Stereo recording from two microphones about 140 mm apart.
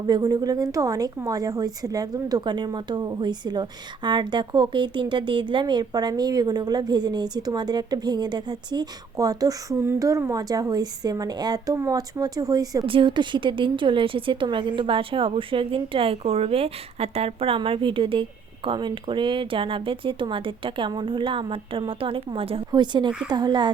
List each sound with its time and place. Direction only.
0.0 s a woman's voice: 30° right (ahead or behind)
12.8 s a woman's voice: 40° right (ahead or behind)